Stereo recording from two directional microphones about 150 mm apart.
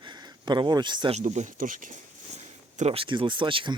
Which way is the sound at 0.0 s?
30° right (ahead or behind).